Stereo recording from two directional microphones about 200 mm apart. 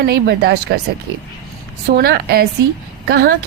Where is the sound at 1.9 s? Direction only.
50° right (ahead or behind).